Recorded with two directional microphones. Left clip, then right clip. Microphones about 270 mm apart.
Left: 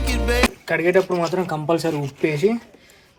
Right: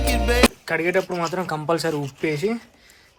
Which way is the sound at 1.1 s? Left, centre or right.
Right.